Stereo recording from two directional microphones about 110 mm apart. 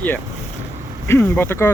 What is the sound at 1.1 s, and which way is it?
Speech, 20° left (ahead or behind).